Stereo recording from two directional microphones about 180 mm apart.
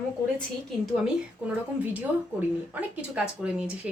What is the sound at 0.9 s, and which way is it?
A woman's voice, 5° right (ahead or behind).